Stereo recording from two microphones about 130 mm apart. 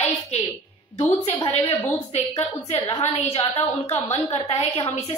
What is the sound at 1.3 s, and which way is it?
A woman's voice, 40° left (ahead or behind).